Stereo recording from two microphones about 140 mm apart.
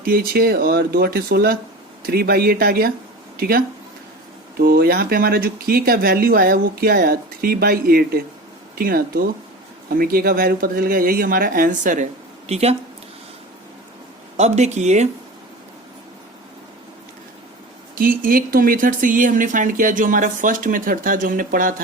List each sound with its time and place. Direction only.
0.0 s speech: 90° right
4.6 s speech: 90° right; by 12.0 s 65° right (ahead or behind)
12.5 s speech: 50° right (ahead or behind)
14.3 s speech: 50° right (ahead or behind)
17.9 s speech: 90° right